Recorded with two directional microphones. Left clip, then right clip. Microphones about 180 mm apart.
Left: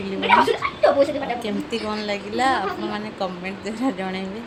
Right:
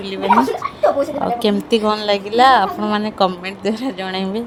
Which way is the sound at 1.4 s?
45° right (ahead or behind).